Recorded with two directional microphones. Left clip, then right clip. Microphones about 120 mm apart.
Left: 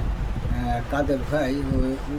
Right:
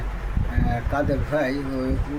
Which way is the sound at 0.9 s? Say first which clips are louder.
Right 1 dB; 15° left (ahead or behind).